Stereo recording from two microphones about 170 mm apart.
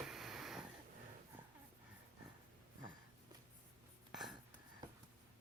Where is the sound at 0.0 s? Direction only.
Centre (ahead or behind).